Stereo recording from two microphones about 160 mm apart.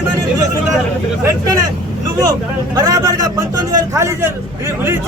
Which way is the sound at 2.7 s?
20° right (ahead or behind).